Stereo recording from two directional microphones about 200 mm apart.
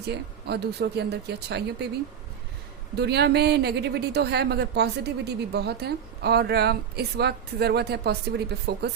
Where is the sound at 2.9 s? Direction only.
55° right (ahead or behind).